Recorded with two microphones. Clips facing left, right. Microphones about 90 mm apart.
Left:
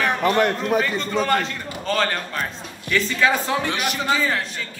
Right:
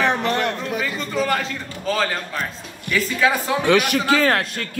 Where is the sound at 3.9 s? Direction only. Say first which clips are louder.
Right 4 dB; 70° right (ahead or behind).